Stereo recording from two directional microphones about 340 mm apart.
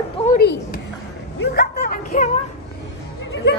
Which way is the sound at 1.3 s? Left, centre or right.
Left.